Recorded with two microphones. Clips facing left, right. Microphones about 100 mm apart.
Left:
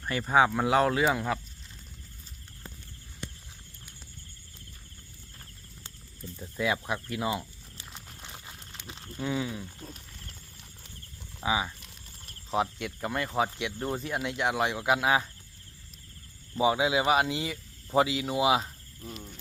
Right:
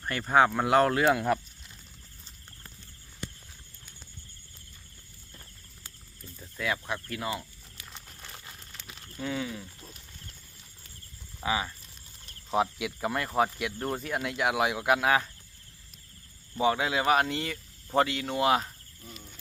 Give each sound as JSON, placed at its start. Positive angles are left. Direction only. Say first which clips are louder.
{"t": 0.0, "sound": "speech", "louder": "right 1 dB", "side_deg": 5}
{"t": 6.3, "sound": "speech", "louder": "left 3 dB", "side_deg": 15}
{"t": 8.2, "sound": "a sound", "louder": "left 1 dB", "side_deg": 20}
{"t": 8.9, "sound": "a sound", "louder": "left 3 dB", "side_deg": 25}
{"t": 9.2, "sound": "speech", "louder": "left 2 dB", "side_deg": 15}
{"t": 11.3, "sound": "speech", "louder": "left 1 dB", "side_deg": 10}
{"t": 12.5, "sound": "speech", "louder": "right 2 dB", "side_deg": 0}
{"t": 16.6, "sound": "speech", "louder": "left 1 dB", "side_deg": 10}